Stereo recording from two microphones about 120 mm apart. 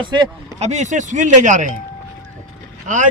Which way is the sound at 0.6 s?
75° right (ahead or behind).